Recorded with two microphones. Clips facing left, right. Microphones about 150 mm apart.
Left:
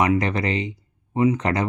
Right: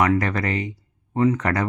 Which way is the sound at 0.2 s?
20° left (ahead or behind).